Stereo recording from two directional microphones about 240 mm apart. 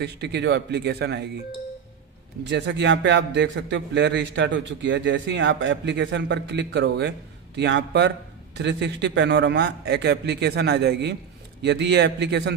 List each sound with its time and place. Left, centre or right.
0.0 s a man's voice: right
2.4 s a man's voice: right